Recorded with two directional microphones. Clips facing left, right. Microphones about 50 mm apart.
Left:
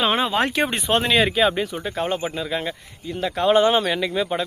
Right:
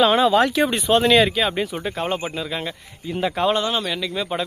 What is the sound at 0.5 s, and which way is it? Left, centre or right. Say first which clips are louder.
Speech: right 3 dB; left.